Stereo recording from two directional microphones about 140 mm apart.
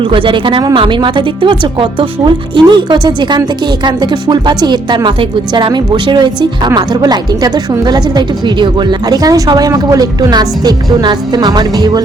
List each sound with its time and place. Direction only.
0.0 s speech: 40° right (ahead or behind)